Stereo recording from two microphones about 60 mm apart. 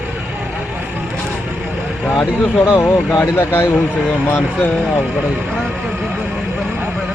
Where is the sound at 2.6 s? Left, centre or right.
Left.